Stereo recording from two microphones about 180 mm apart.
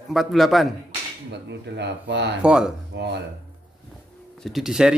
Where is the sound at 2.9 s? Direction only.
70° right (ahead or behind).